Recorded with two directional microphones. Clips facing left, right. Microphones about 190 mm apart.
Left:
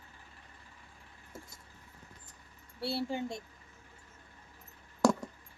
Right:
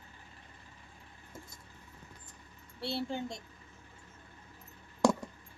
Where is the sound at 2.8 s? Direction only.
5° left (ahead or behind).